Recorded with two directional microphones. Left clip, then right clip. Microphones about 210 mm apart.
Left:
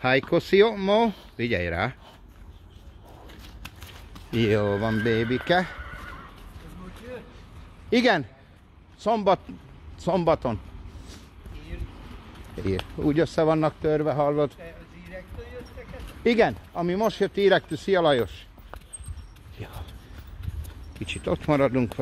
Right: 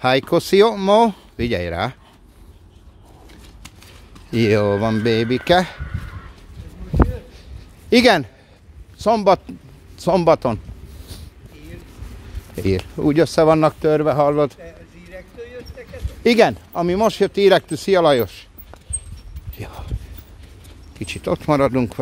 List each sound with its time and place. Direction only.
0.0 s speech: 20° right (ahead or behind)
4.3 s speech: 30° right (ahead or behind)
7.9 s speech: 35° right (ahead or behind)
13.0 s speech: 35° right (ahead or behind)
15.1 s dog: 55° right (ahead or behind)
16.3 s speech: 40° right (ahead or behind)
19.6 s a sound: 30° right (ahead or behind)
21.0 s speech: 25° right (ahead or behind)